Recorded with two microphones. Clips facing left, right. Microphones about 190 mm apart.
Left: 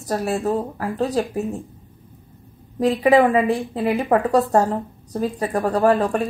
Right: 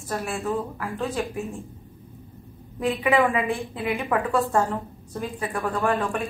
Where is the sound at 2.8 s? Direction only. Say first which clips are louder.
Left 6 dB; 35° left (ahead or behind).